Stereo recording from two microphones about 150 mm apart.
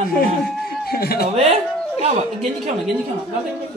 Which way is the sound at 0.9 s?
90° left.